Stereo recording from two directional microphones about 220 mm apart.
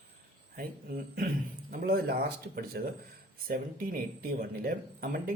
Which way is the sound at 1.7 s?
45° right (ahead or behind).